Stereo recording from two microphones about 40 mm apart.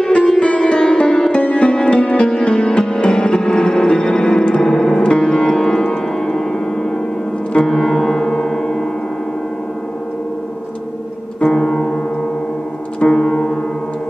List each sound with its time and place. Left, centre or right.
0.4 s music: left
7.6 s gong: centre
11.4 s music: centre
13.1 s music: centre